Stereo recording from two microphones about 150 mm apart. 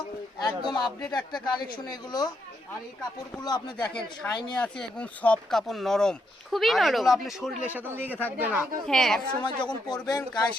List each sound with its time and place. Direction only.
0.3 s a man's voice: 30° left (ahead or behind)
3.4 s a man's voice: 25° left (ahead or behind)
4.5 s speech: 5° left (ahead or behind)
7.7 s a man's voice: 15° right (ahead or behind)
8.9 s speech: 5° left (ahead or behind)
9.4 s a man's voice: 30° left (ahead or behind)